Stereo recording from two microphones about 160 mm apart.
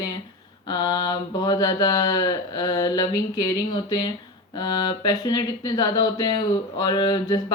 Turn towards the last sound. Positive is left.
turn(degrees=25)  # may be behind; listen again after turning